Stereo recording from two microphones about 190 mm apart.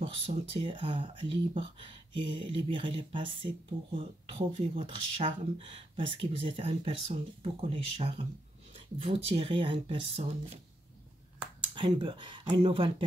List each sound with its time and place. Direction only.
0.0 s speech: 30° right (ahead or behind)
11.7 s speech: 25° right (ahead or behind)